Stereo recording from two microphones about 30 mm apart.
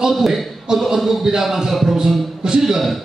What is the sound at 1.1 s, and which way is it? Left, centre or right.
Speech, centre.